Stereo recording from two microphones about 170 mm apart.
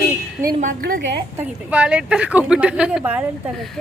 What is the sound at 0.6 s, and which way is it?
Speech, 60° right (ahead or behind).